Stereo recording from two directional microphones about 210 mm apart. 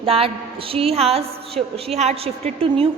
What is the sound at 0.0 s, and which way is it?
A woman's voice, 25° right (ahead or behind).